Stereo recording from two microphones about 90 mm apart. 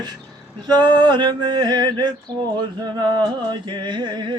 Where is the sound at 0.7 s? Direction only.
55° right (ahead or behind).